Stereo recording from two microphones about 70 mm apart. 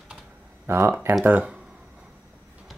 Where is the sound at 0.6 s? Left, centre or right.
Right.